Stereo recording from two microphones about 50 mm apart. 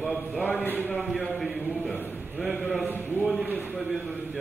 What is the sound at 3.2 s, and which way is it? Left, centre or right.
Speech, centre.